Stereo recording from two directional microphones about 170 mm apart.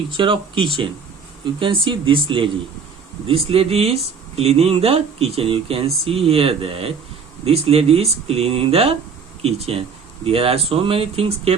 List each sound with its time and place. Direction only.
0.1 s speech: 30° right (ahead or behind)